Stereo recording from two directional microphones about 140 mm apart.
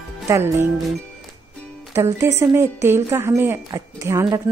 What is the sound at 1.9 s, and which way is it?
A woman's voice, 20° right (ahead or behind).